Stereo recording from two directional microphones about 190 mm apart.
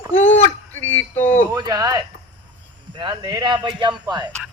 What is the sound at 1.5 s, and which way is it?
A man's voice, 20° right (ahead or behind).